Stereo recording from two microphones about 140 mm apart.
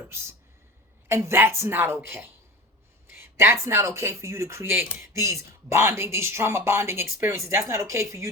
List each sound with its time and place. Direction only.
0.1 s a woman's voice: 20° right (ahead or behind)